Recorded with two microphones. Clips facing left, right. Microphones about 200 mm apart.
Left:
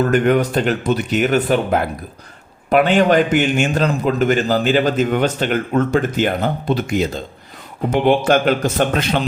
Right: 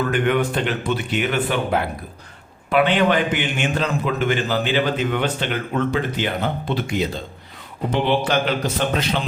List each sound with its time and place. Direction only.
0.0 s a man's voice: 40° left (ahead or behind)